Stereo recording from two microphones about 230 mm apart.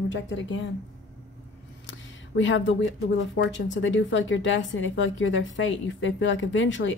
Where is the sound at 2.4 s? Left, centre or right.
Left.